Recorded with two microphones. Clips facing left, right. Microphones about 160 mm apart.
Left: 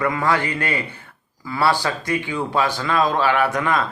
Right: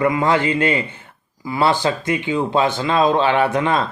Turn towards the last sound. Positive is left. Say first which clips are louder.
# right 3 dB
turn(degrees=-25)  # may be behind; listen again after turning